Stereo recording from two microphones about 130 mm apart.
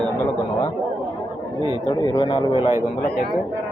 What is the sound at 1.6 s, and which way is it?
Speech, 35° left (ahead or behind).